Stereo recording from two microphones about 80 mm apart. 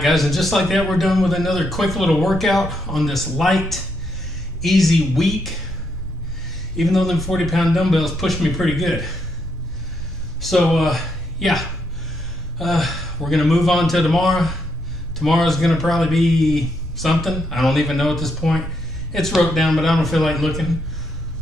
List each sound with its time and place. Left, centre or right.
0.0 s a man's voice: centre
6.8 s a man's voice: centre
10.4 s a man's voice: centre